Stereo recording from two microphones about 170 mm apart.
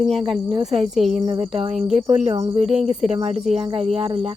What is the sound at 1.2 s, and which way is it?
Speech, 30° right (ahead or behind).